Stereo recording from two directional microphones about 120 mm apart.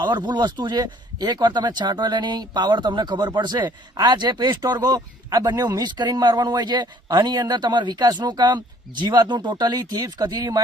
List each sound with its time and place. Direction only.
0.0 s speech: 35° right (ahead or behind)